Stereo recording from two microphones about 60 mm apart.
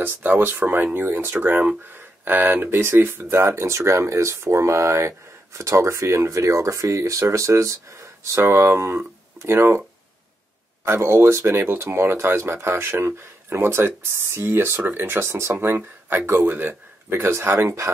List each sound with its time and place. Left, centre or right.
0.0 s speech: right
10.9 s speech: right